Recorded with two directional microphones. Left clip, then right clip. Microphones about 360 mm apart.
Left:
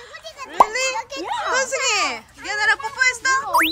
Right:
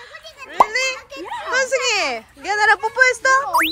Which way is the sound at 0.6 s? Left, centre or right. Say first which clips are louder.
Even; centre.